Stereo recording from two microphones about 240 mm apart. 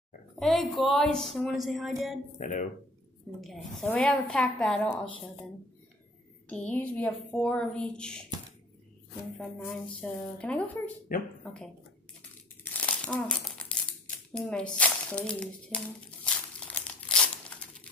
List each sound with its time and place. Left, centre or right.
0.4 s speech: centre
2.3 s speech: left
3.3 s speech: centre
6.5 s speech: centre
9.4 s speech: centre
11.1 s speech: left
12.8 s crumpling: centre